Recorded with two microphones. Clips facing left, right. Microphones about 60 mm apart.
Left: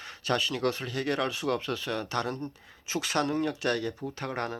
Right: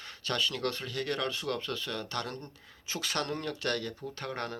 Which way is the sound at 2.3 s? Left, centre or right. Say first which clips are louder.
Left 7 dB; centre.